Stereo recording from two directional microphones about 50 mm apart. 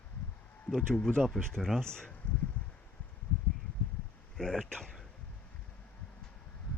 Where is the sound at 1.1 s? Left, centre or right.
Centre.